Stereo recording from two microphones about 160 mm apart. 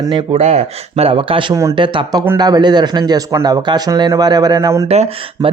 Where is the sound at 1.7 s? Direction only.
30° right (ahead or behind).